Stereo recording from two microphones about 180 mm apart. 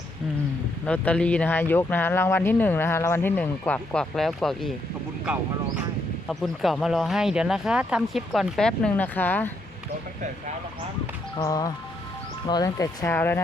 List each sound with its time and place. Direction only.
0.9 s speech: 5° left (ahead or behind)
6.2 s speech: centre (ahead or behind)
11.3 s speech: 20° left (ahead or behind)